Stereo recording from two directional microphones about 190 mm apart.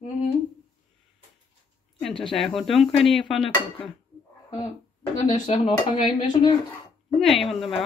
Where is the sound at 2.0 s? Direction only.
Centre (ahead or behind).